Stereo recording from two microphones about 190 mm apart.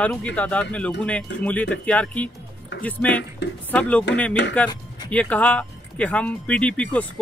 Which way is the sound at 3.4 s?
65° left (ahead or behind).